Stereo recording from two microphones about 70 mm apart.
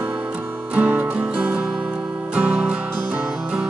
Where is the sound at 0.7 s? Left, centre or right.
Right.